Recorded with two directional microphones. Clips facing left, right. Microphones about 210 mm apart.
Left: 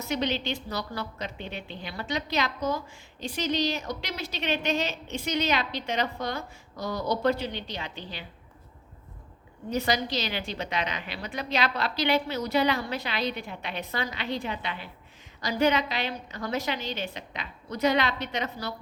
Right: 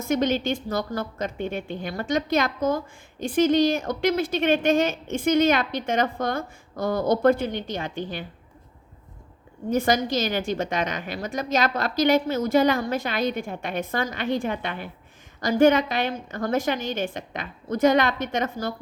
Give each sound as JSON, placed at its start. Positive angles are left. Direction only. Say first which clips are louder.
{"t": 0.0, "sound": "a woman's voice", "louder": "right 6 dB", "side_deg": -50}
{"t": 9.6, "sound": "a woman's voice", "louder": "right 6 dB", "side_deg": -50}